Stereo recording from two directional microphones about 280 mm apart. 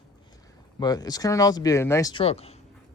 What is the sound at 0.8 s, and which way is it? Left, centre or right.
Speech, centre.